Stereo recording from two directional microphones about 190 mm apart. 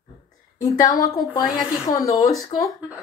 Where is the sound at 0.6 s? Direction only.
20° left (ahead or behind).